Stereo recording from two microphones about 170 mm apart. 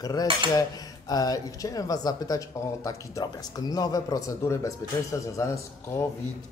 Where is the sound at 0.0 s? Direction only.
20° left (ahead or behind).